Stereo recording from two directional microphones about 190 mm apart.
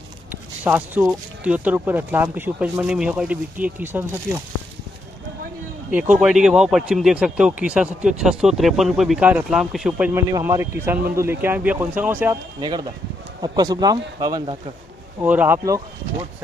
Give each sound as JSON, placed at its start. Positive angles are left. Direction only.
{"t": 0.3, "sound": "speech", "side_deg": -10}
{"t": 5.9, "sound": "speech", "side_deg": -10}
{"t": 12.5, "sound": "a man's voice", "side_deg": -20}
{"t": 15.2, "sound": "speech", "side_deg": -10}